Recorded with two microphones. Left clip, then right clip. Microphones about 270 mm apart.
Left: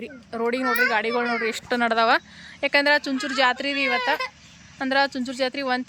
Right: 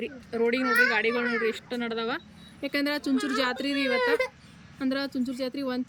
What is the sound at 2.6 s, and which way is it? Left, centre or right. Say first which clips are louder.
Speech: left 10 dB; centre.